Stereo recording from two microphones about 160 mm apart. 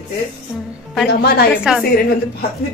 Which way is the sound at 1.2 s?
80° left.